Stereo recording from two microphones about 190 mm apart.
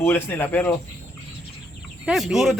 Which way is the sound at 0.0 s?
10° left (ahead or behind).